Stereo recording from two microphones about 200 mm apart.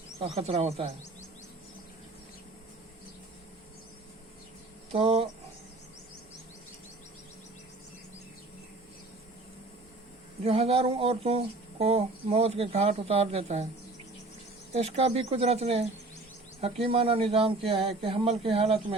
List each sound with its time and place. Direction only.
0.2 s speech: 30° right (ahead or behind)
4.9 s speech: 30° right (ahead or behind)
10.4 s speech: 30° right (ahead or behind)
14.7 s speech: 30° right (ahead or behind)